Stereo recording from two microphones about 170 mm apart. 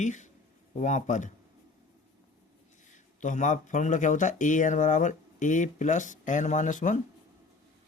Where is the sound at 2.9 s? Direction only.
45° left (ahead or behind).